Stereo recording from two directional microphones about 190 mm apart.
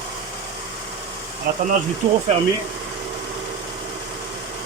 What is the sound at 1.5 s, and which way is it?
Speech, 50° right (ahead or behind).